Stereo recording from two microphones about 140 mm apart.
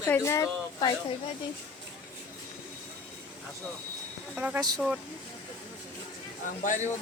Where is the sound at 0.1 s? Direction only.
20° left (ahead or behind).